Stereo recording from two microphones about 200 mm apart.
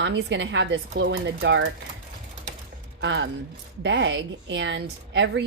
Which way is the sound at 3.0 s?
65° right (ahead or behind).